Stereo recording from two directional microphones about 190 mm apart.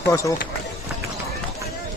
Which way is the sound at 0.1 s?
15° left (ahead or behind).